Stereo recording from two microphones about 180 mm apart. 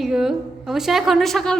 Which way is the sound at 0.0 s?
5° right (ahead or behind).